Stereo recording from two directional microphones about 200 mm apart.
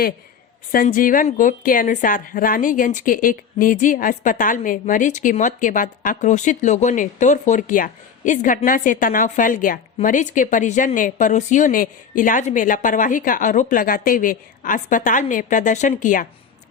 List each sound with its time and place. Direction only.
0.7 s a woman's voice: 45° left (ahead or behind)